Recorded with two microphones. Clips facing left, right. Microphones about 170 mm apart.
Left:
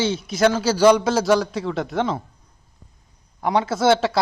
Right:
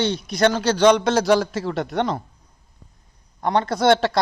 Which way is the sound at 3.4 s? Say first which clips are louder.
Even; 5° left (ahead or behind).